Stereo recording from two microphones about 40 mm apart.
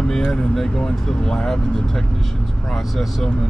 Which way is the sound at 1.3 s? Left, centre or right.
Centre.